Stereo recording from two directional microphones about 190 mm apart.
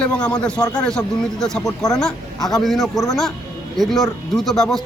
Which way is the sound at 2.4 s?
Centre (ahead or behind).